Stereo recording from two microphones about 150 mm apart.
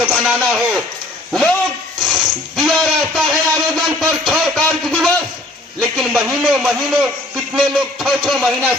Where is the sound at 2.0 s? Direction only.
Centre (ahead or behind).